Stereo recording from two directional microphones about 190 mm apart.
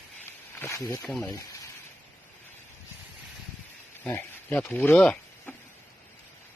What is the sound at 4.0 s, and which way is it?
Speech, 10° left (ahead or behind).